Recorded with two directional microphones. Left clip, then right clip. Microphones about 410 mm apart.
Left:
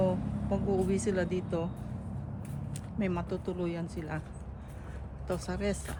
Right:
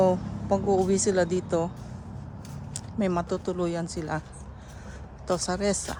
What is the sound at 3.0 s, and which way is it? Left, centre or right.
Speech, centre.